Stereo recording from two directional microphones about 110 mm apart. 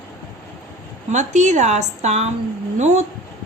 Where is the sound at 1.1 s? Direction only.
90° right.